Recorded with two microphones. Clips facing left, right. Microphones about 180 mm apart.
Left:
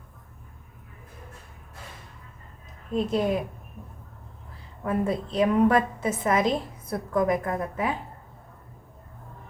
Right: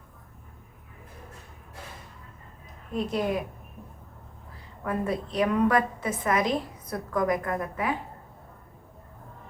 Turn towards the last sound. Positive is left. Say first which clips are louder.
# left 1 dB
turn(degrees=25)  # may be behind; listen again after turning